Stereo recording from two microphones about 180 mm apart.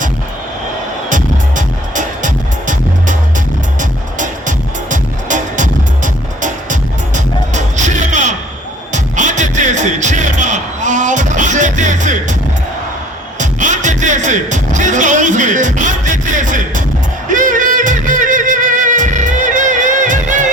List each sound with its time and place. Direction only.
1.1 s music: 45° right (ahead or behind)
13.4 s music: 45° right (ahead or behind)